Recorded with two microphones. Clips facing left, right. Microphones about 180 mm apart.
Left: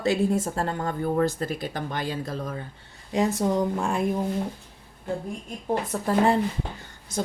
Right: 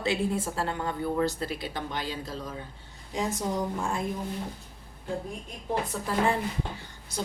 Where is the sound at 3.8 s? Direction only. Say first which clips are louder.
Left 5 dB; 65° left (ahead or behind).